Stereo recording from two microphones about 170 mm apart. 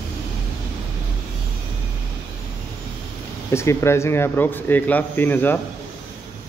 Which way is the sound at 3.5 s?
15° left (ahead or behind).